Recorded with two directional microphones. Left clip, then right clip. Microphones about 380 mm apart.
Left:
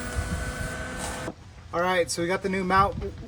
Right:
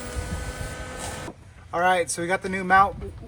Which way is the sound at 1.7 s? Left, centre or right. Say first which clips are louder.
Right 3 dB; centre.